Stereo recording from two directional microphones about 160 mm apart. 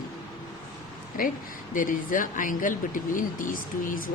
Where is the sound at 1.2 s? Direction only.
60° left (ahead or behind).